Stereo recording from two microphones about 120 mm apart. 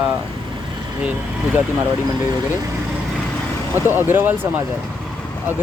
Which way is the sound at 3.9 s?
15° right (ahead or behind).